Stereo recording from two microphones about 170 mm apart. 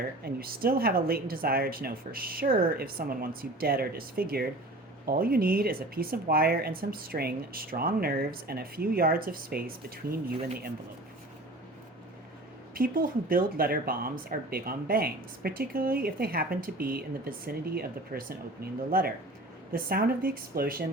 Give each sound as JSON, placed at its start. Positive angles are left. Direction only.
{"t": 0.3, "sound": "speech", "side_deg": -60}
{"t": 12.7, "sound": "speech", "side_deg": -60}